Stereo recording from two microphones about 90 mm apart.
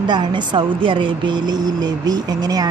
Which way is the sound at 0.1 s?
55° right (ahead or behind).